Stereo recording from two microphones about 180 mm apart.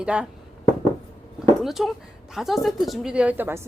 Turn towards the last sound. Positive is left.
turn(degrees=-10)  # may be behind; listen again after turning